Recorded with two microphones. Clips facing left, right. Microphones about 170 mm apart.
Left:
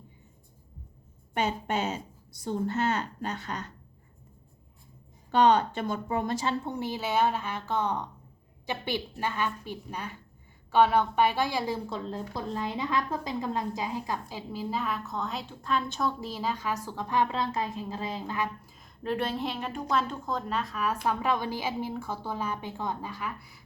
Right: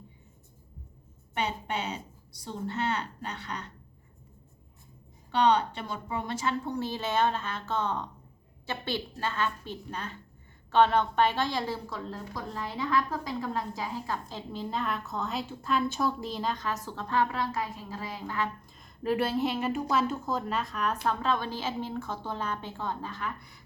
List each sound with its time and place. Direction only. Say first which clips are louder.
1.3 s a woman's voice: left 3 dB; 45° left (ahead or behind)
5.3 s a woman's voice: left 2 dB; 45° left (ahead or behind)
6.4 s a woman's voice: even; 25° left (ahead or behind)
11.9 s a woman's voice: left 3 dB; 25° left (ahead or behind); by 16.1 s 5° right (ahead or behind)
16.2 s a woman's voice: even; 5° left (ahead or behind); by 18.4 s 20° left (ahead or behind)
18.6 s a woman's voice: right 3 dB; centre (ahead or behind)